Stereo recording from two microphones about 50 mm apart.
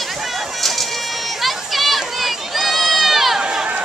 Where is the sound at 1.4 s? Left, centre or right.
Centre.